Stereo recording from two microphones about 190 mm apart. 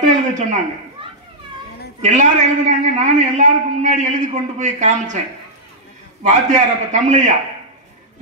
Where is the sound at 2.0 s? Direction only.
40° right (ahead or behind).